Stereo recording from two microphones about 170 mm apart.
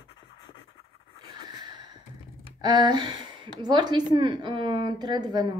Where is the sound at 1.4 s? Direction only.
25° right (ahead or behind).